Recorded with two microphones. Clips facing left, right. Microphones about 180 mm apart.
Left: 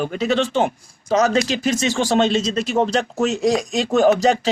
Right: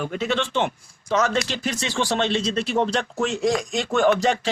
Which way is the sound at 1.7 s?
45° left (ahead or behind).